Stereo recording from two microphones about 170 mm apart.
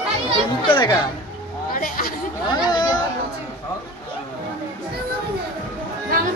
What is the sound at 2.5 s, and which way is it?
Speech, 25° left (ahead or behind).